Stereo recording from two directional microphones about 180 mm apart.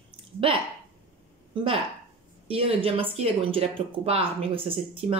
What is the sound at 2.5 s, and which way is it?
Speech, 30° right (ahead or behind).